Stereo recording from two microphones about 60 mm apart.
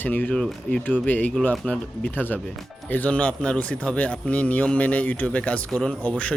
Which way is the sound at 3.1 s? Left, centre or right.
Centre.